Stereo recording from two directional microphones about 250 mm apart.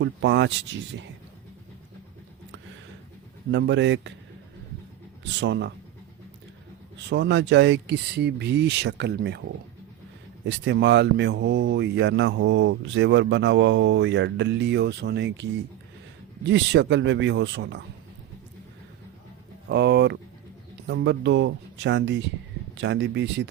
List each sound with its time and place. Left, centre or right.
0.0 s speech: right
3.5 s speech: right
5.4 s speech: right
7.1 s speech: right
10.4 s speech: right
16.5 s speech: right
19.6 s speech: right